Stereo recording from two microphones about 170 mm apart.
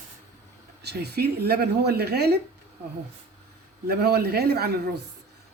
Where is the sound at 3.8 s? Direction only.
70° right (ahead or behind).